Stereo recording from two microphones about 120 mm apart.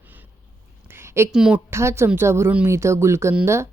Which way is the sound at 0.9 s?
20° right (ahead or behind).